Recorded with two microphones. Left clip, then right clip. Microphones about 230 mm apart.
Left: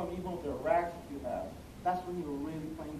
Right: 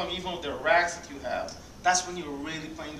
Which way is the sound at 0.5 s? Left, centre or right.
Centre.